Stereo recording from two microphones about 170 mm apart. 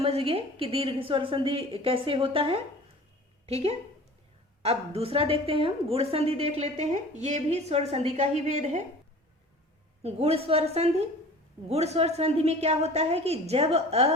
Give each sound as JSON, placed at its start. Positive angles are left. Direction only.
{"t": 0.0, "sound": "a woman's voice", "side_deg": -35}
{"t": 10.0, "sound": "a woman's voice", "side_deg": -35}